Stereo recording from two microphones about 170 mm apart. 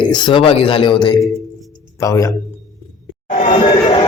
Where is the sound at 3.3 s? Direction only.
50° left (ahead or behind).